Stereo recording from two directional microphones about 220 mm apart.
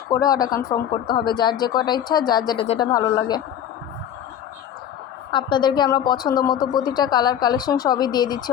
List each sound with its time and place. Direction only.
0.1 s a woman's voice: 15° left (ahead or behind)
5.3 s a woman's voice: 20° left (ahead or behind)